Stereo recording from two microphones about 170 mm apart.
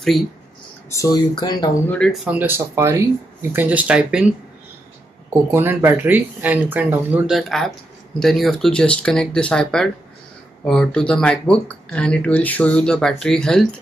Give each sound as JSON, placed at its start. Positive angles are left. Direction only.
{"t": 0.9, "sound": "speech", "side_deg": 20}
{"t": 1.9, "sound": "speech", "side_deg": 5}
{"t": 2.2, "sound": "speech", "side_deg": -10}
{"t": 5.5, "sound": "speech", "side_deg": -15}